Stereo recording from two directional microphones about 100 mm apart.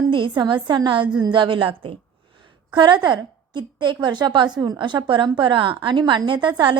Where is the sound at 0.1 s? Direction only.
55° right (ahead or behind).